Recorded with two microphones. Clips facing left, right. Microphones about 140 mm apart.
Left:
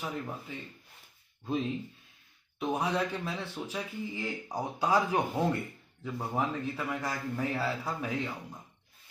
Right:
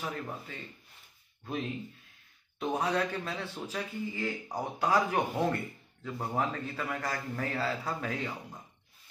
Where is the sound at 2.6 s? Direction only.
10° left (ahead or behind).